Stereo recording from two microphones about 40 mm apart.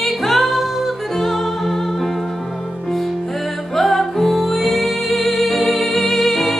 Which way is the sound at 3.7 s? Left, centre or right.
Centre.